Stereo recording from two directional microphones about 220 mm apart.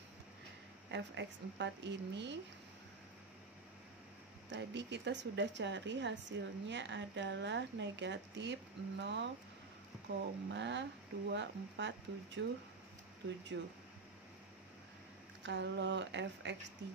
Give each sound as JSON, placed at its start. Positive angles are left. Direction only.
{"t": 0.9, "sound": "a woman's voice", "side_deg": -55}
{"t": 4.5, "sound": "a woman's voice", "side_deg": -55}
{"t": 10.5, "sound": "a woman's voice", "side_deg": -55}
{"t": 13.5, "sound": "speech", "side_deg": -55}
{"t": 15.4, "sound": "a woman's voice", "side_deg": -55}